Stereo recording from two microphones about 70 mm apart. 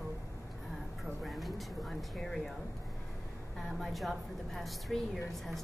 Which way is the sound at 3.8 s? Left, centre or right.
Centre.